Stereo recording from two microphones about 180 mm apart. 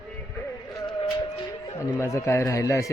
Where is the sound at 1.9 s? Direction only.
15° left (ahead or behind).